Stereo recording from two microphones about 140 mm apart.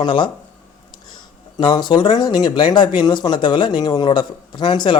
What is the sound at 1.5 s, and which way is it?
A man's voice, 35° left (ahead or behind).